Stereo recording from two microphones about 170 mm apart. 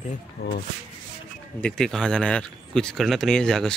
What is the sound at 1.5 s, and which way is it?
Speech, 5° left (ahead or behind).